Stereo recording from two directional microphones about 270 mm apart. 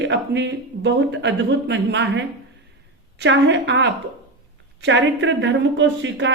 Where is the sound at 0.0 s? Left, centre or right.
Right.